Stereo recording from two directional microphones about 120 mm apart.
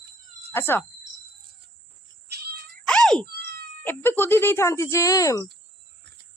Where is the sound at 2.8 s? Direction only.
5° left (ahead or behind).